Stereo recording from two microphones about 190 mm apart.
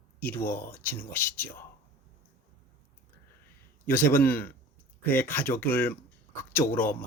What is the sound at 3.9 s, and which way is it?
Speech, 10° left (ahead or behind).